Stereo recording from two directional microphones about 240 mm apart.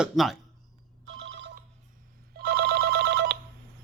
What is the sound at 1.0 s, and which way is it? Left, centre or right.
Telephone bell ringing, right.